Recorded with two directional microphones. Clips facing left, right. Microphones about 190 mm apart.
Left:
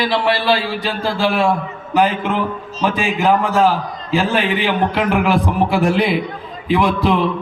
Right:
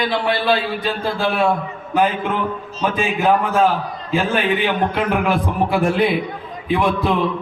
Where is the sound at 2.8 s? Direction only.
90° left.